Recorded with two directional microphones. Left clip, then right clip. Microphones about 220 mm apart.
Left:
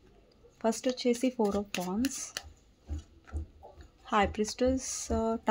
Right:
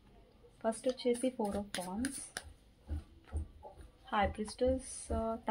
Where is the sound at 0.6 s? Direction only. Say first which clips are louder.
Left 5 dB; 55° left (ahead or behind).